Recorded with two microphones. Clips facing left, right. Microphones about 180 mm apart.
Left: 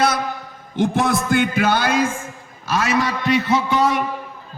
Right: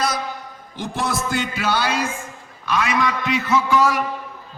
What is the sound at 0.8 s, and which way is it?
Speech, 60° left (ahead or behind).